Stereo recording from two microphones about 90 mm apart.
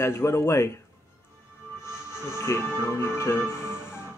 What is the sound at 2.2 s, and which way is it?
Speech, 30° left (ahead or behind).